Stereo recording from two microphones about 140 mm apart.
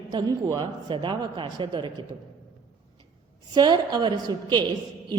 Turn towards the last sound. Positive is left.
turn(degrees=-30)  # may be behind; listen again after turning